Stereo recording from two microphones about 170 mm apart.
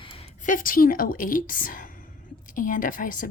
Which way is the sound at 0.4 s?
55° left (ahead or behind).